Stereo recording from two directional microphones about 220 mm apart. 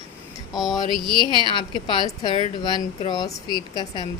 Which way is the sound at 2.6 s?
20° left (ahead or behind).